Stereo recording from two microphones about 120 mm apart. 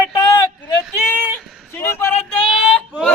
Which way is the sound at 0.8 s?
Centre (ahead or behind).